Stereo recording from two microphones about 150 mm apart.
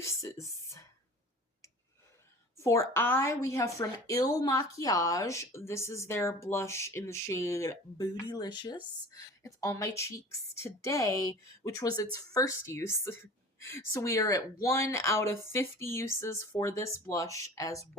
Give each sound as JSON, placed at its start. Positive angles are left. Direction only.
{"t": 0.0, "sound": "speech", "side_deg": 20}
{"t": 2.6, "sound": "a woman's voice", "side_deg": 20}